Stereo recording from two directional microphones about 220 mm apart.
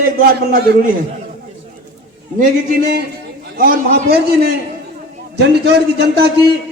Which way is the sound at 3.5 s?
45° right (ahead or behind).